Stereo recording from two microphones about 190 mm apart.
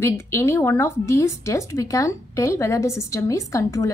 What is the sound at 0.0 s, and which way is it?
A woman's voice, 10° left (ahead or behind).